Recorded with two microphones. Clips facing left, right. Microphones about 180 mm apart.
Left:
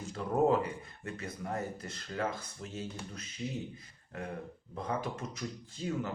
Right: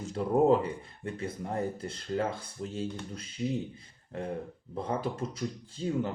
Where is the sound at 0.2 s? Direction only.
20° right (ahead or behind).